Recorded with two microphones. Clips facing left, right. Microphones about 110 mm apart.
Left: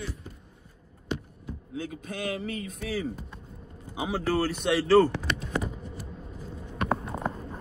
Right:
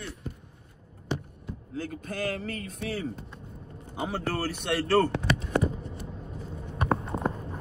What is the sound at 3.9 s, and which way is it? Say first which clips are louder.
Speech: left 3 dB; 5° left (ahead or behind).